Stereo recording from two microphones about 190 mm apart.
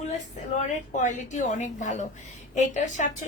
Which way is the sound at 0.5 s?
40° left (ahead or behind).